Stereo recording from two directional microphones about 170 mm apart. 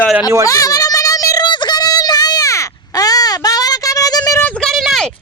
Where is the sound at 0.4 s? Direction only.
20° left (ahead or behind).